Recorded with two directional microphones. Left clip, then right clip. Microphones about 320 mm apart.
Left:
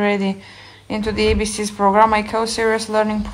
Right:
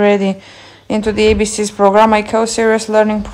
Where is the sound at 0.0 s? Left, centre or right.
Centre.